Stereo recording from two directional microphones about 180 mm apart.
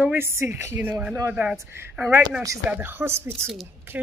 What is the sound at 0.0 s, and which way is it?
A woman's voice, 10° right (ahead or behind).